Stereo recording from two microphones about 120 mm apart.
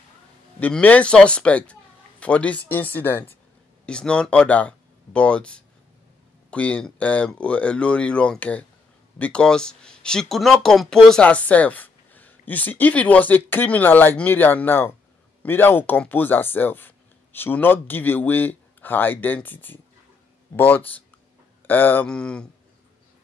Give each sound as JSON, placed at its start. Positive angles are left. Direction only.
{"t": 0.6, "sound": "speech", "side_deg": 10}